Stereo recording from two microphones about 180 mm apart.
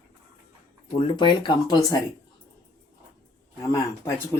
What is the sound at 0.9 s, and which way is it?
Speech, 25° left (ahead or behind).